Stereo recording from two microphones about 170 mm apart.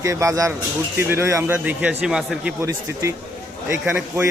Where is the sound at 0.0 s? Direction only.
20° right (ahead or behind).